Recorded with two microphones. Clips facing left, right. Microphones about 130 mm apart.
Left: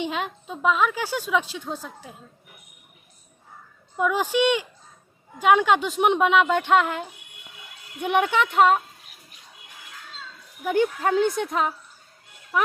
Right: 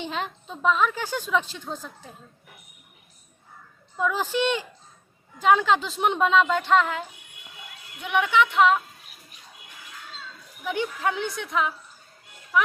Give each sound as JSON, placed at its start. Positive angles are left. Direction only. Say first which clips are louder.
{"t": 0.0, "sound": "a woman's voice", "louder": "left 3 dB", "side_deg": 10}
{"t": 3.9, "sound": "a woman's voice", "louder": "left 3 dB", "side_deg": 15}
{"t": 8.0, "sound": "speech", "louder": "left 1 dB", "side_deg": 45}
{"t": 10.6, "sound": "speech", "louder": "left 5 dB", "side_deg": 45}